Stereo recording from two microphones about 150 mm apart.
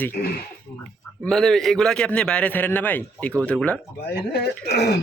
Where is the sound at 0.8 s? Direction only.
5° left (ahead or behind).